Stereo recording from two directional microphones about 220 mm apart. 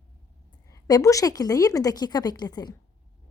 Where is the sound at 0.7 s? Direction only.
15° left (ahead or behind).